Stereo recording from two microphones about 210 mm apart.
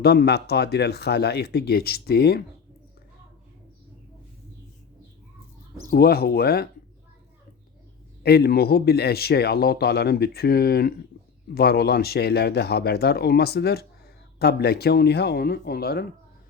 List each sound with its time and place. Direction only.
0.0 s speech: 50° left (ahead or behind)
5.9 s speech: 45° left (ahead or behind)
8.2 s speech: 50° left (ahead or behind)